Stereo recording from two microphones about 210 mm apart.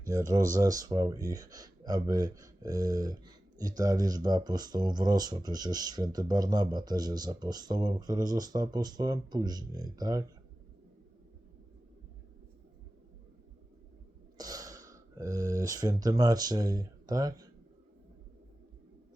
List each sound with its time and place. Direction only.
0.0 s speech: 15° right (ahead or behind)
14.3 s speech: 15° right (ahead or behind)